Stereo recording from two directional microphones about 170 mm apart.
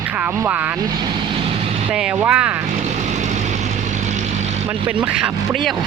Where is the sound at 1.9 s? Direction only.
5° right (ahead or behind).